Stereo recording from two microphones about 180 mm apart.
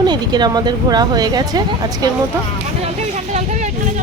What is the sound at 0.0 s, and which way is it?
Speech, 25° right (ahead or behind).